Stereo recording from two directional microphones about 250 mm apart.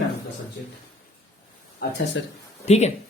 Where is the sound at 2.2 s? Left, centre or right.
Left.